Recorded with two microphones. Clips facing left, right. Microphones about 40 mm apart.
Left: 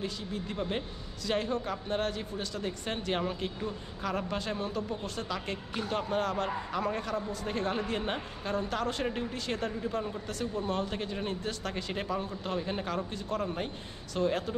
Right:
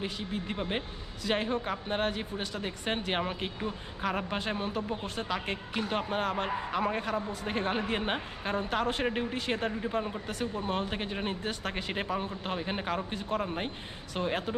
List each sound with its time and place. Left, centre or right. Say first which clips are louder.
0.0 s a man's voice: right 1 dB; right